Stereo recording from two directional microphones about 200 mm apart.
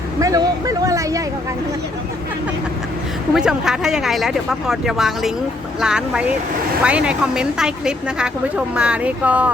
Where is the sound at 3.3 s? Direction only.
5° right (ahead or behind).